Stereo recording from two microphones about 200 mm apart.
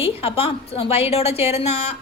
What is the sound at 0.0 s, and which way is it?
A woman's voice, 30° left (ahead or behind).